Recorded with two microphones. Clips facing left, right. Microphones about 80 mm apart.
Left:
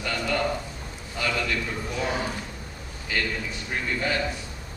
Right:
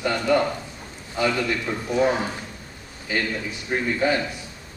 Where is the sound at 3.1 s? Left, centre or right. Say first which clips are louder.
Right 3 dB; right.